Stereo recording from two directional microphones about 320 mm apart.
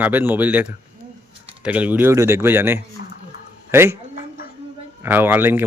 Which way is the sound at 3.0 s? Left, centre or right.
Left.